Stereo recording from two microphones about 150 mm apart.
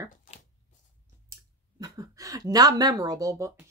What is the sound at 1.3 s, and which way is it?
Clicking, 20° right (ahead or behind).